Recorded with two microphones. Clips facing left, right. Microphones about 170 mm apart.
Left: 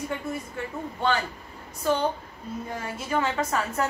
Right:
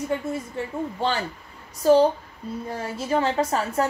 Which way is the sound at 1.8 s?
35° right (ahead or behind).